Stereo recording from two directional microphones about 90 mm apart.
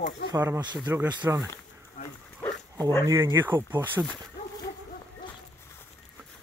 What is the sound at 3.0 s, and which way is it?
Speech, 35° right (ahead or behind).